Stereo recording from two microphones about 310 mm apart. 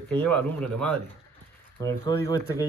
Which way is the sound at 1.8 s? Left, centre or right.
Centre.